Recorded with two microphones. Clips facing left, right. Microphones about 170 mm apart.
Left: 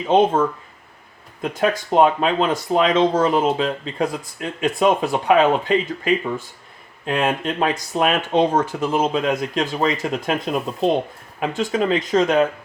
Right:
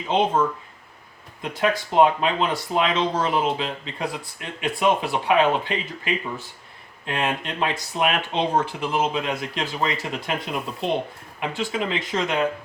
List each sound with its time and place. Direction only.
1.4 s speech: 45° left (ahead or behind)